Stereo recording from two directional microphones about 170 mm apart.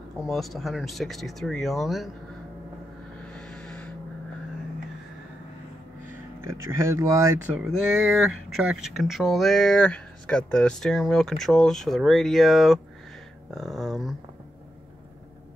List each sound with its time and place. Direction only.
0.2 s speech: centre (ahead or behind)
3.3 s owl: 5° left (ahead or behind)
6.4 s speech: 15° right (ahead or behind)
7.5 s speech: 5° right (ahead or behind)